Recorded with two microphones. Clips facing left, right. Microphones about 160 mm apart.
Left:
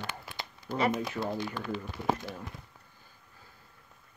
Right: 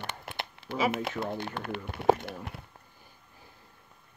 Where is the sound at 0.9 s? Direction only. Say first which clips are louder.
Even; 60° right (ahead or behind).